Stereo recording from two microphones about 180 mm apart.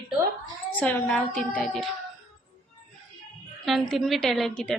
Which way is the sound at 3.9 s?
Centre (ahead or behind).